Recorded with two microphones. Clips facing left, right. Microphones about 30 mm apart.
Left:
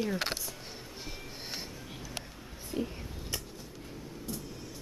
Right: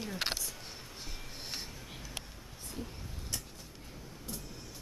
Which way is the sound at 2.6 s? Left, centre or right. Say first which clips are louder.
Left 8 dB; centre.